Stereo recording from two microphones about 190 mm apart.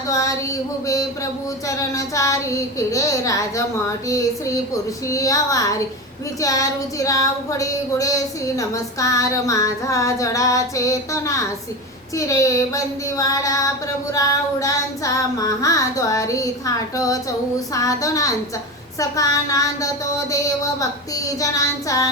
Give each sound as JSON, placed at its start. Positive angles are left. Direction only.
{"t": 0.1, "sound": "female singing", "side_deg": 15}
{"t": 5.0, "sound": "female singing", "side_deg": 15}